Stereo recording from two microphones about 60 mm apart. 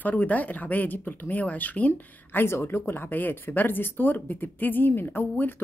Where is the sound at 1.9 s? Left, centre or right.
Left.